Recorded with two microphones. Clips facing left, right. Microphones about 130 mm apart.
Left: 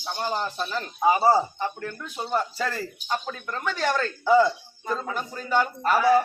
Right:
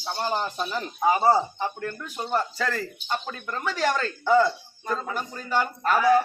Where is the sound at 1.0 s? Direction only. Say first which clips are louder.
Left 1 dB; 10° left (ahead or behind).